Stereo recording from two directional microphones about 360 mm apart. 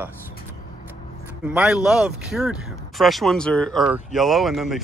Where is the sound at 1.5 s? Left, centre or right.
Centre.